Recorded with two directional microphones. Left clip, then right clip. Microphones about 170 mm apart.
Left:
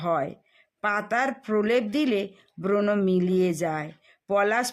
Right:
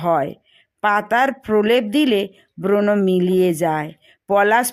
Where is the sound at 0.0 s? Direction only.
30° right (ahead or behind).